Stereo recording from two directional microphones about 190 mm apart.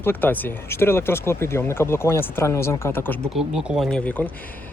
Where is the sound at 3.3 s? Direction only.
Centre (ahead or behind).